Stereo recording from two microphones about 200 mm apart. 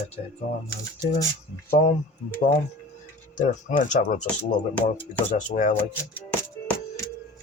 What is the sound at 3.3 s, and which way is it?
Speech, 40° left (ahead or behind).